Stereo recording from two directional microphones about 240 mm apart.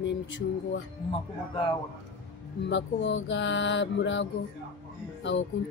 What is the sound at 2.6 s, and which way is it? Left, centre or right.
Speech, left.